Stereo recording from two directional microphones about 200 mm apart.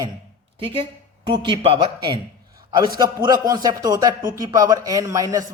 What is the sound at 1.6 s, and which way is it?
Speech, 25° right (ahead or behind).